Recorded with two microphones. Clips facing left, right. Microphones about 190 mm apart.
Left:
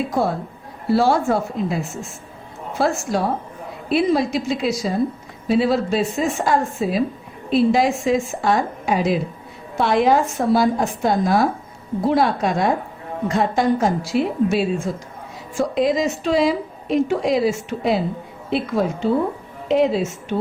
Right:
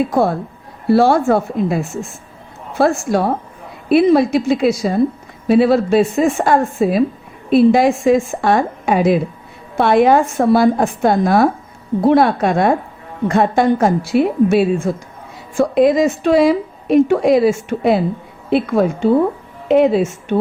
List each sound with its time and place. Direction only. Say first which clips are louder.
0.9 s speech: right 5 dB; 60° right (ahead or behind)